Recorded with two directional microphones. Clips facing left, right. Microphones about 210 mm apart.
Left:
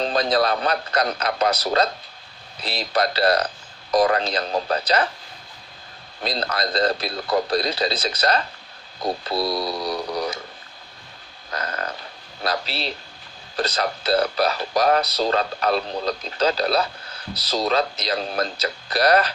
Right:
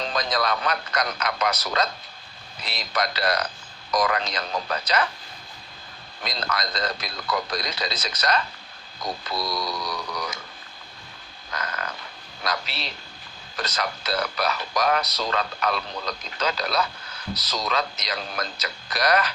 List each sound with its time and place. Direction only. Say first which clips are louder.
0.0 s speech: left 6 dB; 35° left (ahead or behind)
6.2 s speech: left 5 dB; 30° left (ahead or behind)
11.5 s a sound: left 4 dB; 35° left (ahead or behind)
12.4 s speech: left 4 dB; 30° left (ahead or behind)